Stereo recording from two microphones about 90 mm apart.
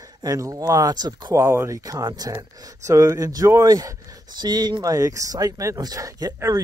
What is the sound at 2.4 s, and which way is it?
Speech, 35° right (ahead or behind).